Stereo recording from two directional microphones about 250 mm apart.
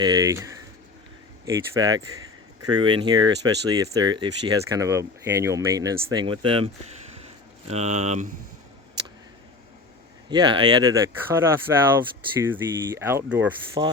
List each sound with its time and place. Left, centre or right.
0.0 s speech: centre
1.7 s speech: centre
7.7 s speech: right
10.2 s speech: centre
13.8 s speech: centre